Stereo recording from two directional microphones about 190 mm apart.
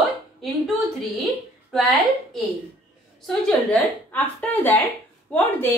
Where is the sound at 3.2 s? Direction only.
5° left (ahead or behind).